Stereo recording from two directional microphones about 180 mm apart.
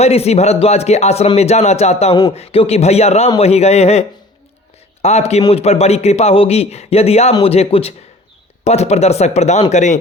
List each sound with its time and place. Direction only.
0.0 s speech: 35° left (ahead or behind)
5.0 s speech: 35° left (ahead or behind)